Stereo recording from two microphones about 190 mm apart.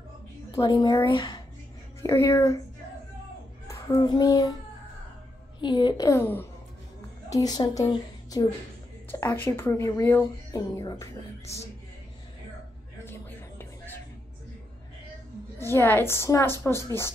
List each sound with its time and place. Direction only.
0.6 s speech: 20° left (ahead or behind)
3.6 s child singing: 15° left (ahead or behind)
5.6 s a woman's voice: 25° left (ahead or behind)
13.0 s music: 10° left (ahead or behind)
15.6 s speech: 10° left (ahead or behind)